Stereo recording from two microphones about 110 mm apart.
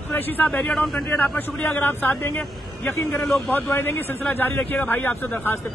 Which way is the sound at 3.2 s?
Centre (ahead or behind).